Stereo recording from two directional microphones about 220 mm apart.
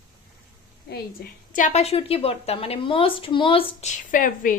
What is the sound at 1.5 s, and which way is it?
A woman's voice, 35° left (ahead or behind).